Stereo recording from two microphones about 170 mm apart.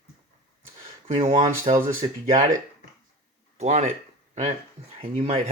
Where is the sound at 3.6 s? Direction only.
45° right (ahead or behind).